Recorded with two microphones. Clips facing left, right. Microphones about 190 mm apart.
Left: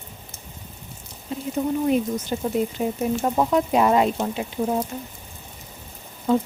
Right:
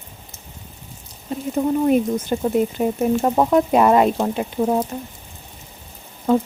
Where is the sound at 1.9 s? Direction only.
55° right (ahead or behind).